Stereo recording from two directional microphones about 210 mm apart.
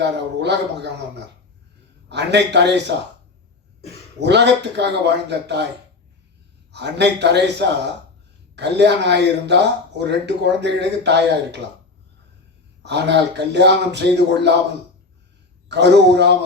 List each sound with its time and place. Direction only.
0.0 s speech: 55° right (ahead or behind)
4.2 s speech: 55° right (ahead or behind)
6.7 s speech: 55° right (ahead or behind)
12.8 s speech: 55° right (ahead or behind)
15.7 s a man's voice: 55° right (ahead or behind)